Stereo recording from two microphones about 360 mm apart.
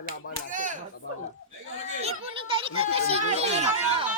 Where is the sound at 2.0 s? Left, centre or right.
Centre.